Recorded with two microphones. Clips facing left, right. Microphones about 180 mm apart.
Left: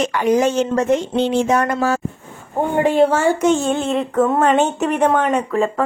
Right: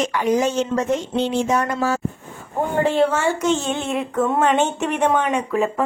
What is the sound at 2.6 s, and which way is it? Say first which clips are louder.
Speech: left 3 dB; 15° left (ahead or behind).